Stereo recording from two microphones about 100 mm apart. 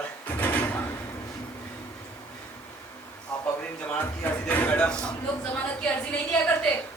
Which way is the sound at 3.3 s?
10° left (ahead or behind).